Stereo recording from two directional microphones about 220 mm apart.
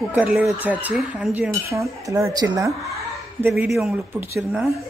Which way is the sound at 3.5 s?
Centre (ahead or behind).